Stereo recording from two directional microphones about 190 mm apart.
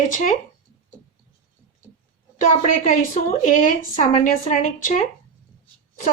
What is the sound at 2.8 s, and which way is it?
A woman's voice, 45° left (ahead or behind).